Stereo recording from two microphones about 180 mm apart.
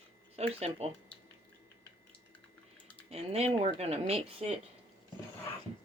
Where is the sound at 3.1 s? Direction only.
35° right (ahead or behind).